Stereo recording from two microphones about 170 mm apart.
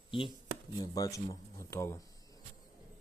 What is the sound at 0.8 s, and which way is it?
A man's voice, 20° left (ahead or behind).